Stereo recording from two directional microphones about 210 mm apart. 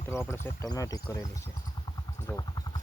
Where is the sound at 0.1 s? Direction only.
10° left (ahead or behind).